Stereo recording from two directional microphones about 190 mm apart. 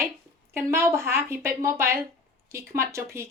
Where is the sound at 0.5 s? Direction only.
15° right (ahead or behind).